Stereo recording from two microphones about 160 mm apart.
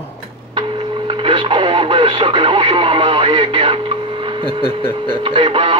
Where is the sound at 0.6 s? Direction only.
30° right (ahead or behind).